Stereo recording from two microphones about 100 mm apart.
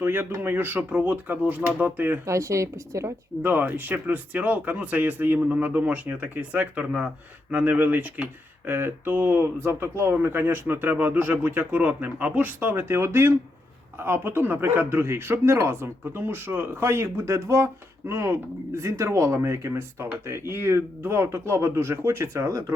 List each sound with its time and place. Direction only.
0.0 s speech: 20° right (ahead or behind)
2.2 s a woman's voice: 30° right (ahead or behind)
3.4 s speech: 20° right (ahead or behind)